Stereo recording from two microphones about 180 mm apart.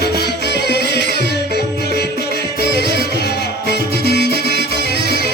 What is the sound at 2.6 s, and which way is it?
Music, 60° right (ahead or behind).